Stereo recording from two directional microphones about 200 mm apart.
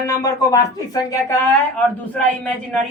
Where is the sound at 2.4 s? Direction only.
5° left (ahead or behind).